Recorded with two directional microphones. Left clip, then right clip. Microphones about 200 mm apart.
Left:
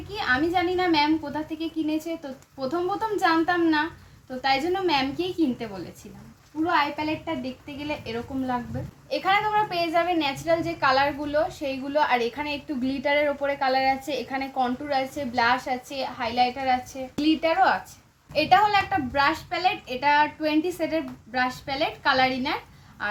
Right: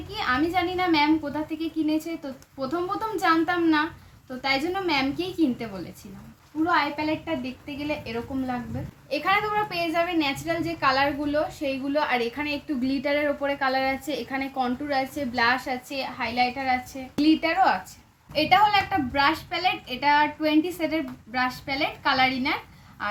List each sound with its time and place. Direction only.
0.1 s a woman's voice: 5° right (ahead or behind)
3.2 s a woman's voice: 5° right (ahead or behind)
6.7 s a woman's voice: centre (ahead or behind)